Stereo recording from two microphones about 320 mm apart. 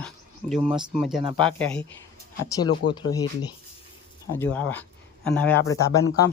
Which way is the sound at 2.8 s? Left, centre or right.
Left.